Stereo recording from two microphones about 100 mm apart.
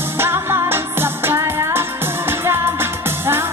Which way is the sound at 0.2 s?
25° right (ahead or behind).